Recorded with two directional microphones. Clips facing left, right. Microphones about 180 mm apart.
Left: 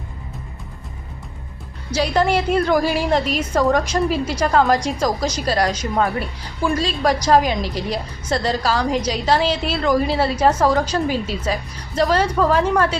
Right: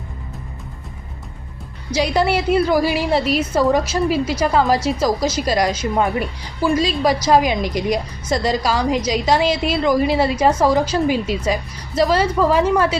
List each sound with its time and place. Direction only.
1.9 s a woman's voice: 10° right (ahead or behind)